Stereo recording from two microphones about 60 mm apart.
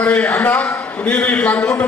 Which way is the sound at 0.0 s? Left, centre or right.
Left.